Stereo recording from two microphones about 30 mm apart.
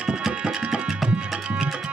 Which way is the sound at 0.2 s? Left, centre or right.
Centre.